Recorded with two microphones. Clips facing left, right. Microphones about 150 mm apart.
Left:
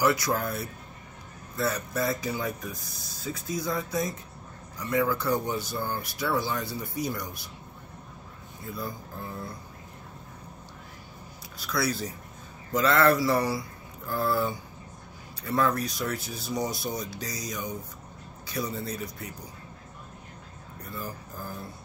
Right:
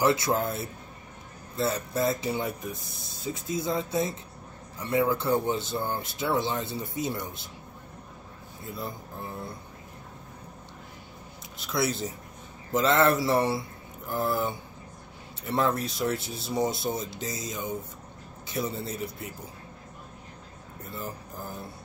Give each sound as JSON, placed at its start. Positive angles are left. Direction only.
{"t": 0.0, "sound": "speech", "side_deg": -25}
{"t": 8.6, "sound": "speech", "side_deg": -25}
{"t": 11.5, "sound": "speech", "side_deg": -20}
{"t": 20.9, "sound": "speech", "side_deg": -25}